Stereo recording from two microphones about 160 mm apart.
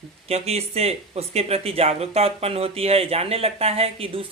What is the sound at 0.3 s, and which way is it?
Speech, 40° right (ahead or behind).